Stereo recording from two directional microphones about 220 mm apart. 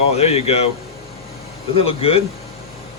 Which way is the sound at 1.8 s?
25° left (ahead or behind).